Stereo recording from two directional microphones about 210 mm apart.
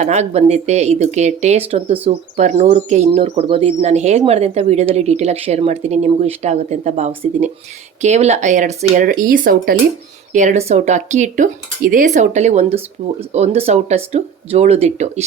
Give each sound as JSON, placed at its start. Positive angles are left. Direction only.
{"t": 0.0, "sound": "speech", "side_deg": -30}